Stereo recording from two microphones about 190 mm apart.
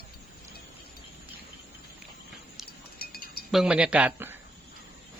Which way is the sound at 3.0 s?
50° left (ahead or behind).